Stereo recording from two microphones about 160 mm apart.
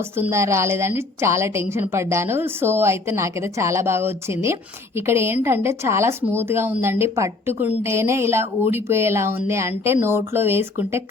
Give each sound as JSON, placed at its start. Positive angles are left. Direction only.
{"t": 0.0, "sound": "a woman's voice", "side_deg": -15}